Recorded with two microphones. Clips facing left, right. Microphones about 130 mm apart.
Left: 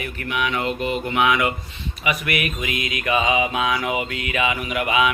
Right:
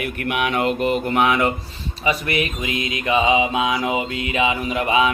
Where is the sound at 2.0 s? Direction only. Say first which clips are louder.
Right 3 dB; 30° right (ahead or behind).